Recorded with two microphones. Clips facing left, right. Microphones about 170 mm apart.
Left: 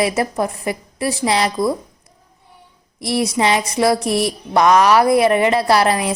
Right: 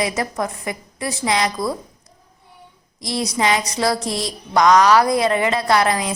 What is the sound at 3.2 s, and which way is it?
A woman's voice, 25° left (ahead or behind).